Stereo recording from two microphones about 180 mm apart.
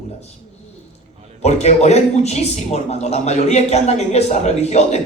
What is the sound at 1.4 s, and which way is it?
Speech, 40° left (ahead or behind).